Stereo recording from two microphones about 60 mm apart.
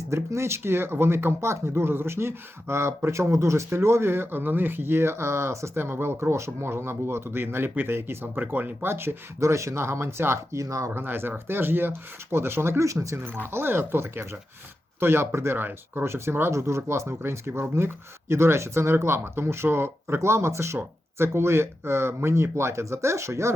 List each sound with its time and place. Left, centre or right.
0.1 s speech: right
8.9 s speech: right
10.6 s speech: right
10.9 s speech: right
12.8 s speech: right
13.4 s speech: right